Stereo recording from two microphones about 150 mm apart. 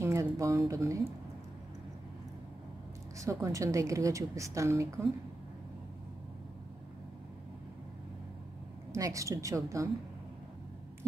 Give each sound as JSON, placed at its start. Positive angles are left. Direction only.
{"t": 0.0, "sound": "speech", "side_deg": -20}
{"t": 3.2, "sound": "a woman's voice", "side_deg": -20}
{"t": 8.9, "sound": "a woman's voice", "side_deg": -20}